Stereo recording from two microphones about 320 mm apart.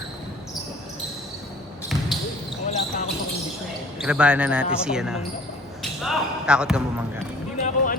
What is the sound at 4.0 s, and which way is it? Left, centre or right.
Speech, centre.